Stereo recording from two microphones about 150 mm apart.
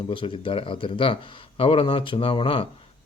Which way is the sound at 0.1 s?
35° left (ahead or behind).